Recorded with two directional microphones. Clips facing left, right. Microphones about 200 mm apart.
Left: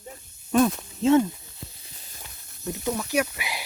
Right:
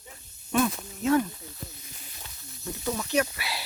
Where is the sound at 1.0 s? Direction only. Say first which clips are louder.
Left 5 dB; 25° left (ahead or behind).